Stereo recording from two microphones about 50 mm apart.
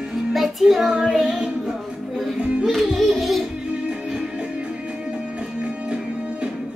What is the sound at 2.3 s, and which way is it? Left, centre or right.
Music, right.